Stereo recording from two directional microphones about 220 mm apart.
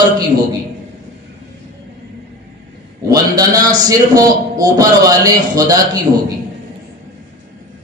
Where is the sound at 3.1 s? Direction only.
15° right (ahead or behind).